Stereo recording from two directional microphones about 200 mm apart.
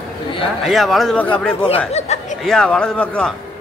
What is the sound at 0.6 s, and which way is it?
Speech, centre (ahead or behind).